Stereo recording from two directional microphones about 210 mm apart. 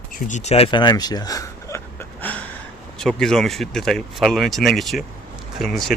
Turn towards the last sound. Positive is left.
turn(degrees=0)  # may be behind; listen again after turning